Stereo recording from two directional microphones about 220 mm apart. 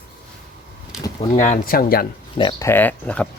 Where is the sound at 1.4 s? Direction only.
35° left (ahead or behind).